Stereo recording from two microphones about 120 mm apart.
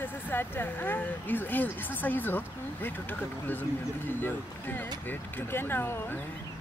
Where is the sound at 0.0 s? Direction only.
15° left (ahead or behind).